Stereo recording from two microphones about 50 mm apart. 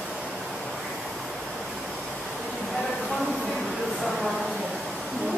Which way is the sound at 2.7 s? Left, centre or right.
Centre.